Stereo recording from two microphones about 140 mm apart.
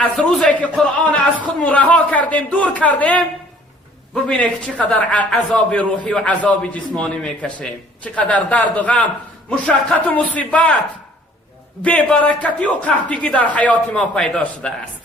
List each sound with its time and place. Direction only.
0.0 s a man's voice: 5° left (ahead or behind)
11.8 s a man's voice: 10° left (ahead or behind)